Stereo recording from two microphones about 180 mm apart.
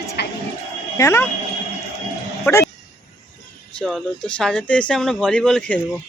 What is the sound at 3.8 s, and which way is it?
Speech, 5° left (ahead or behind).